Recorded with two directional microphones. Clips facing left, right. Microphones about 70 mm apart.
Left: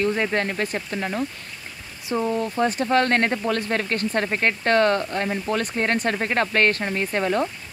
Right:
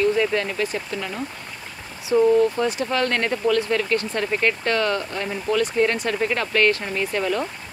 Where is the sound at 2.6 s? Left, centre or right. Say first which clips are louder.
Left 2 dB; left.